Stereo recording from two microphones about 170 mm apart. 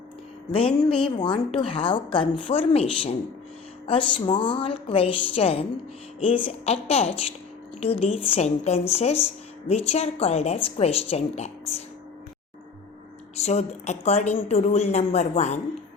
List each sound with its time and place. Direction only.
0.5 s speech: 30° left (ahead or behind)
13.3 s speech: 40° left (ahead or behind)